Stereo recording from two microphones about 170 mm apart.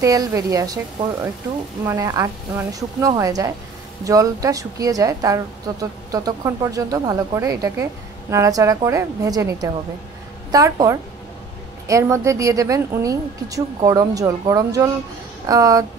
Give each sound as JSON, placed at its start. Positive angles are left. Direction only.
{"t": 0.0, "sound": "a woman's voice", "side_deg": -20}
{"t": 1.9, "sound": "a woman's voice", "side_deg": -20}